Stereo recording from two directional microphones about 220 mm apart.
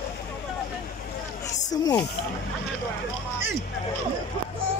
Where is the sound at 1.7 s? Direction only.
15° left (ahead or behind).